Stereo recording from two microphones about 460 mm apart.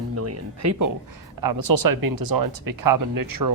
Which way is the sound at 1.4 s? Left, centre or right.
Right.